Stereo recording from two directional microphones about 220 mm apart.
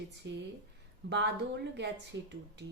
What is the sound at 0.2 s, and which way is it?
Speech, 55° right (ahead or behind).